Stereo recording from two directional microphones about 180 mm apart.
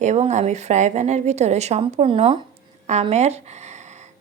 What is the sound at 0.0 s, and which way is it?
A woman's voice, 40° right (ahead or behind).